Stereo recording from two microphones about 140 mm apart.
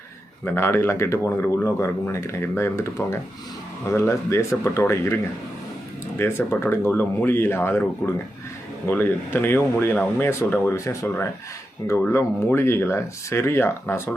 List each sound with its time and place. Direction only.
0.4 s speech: 15° left (ahead or behind)